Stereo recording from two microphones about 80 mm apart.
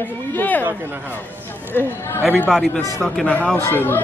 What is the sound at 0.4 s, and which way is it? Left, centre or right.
Chatter, left.